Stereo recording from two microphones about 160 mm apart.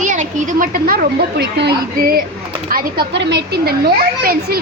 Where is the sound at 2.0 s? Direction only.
70° right (ahead or behind).